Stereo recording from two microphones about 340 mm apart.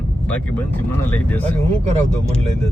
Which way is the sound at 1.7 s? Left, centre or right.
Centre.